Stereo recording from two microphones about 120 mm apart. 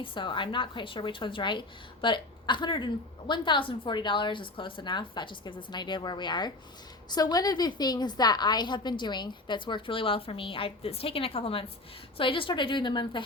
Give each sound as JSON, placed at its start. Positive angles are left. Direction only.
{"t": 0.0, "sound": "a woman's voice", "side_deg": 45}